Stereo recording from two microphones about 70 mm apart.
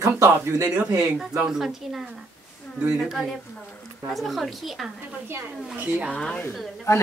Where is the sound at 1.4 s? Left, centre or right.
Centre.